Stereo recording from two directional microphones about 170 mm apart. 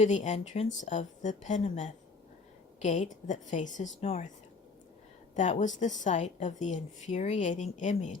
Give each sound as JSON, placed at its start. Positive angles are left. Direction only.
{"t": 0.0, "sound": "a woman's voice", "side_deg": 45}
{"t": 5.3, "sound": "a woman's voice", "side_deg": 45}